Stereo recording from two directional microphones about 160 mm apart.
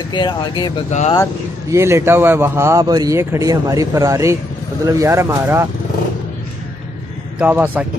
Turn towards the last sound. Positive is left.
turn(degrees=-10)  # may be behind; listen again after turning